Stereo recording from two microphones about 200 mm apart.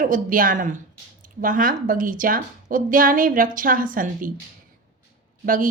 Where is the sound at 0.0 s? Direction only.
40° right (ahead or behind).